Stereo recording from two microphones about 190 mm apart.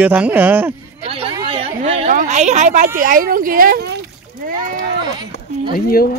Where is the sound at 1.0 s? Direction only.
30° right (ahead or behind); by 4.6 s 50° right (ahead or behind).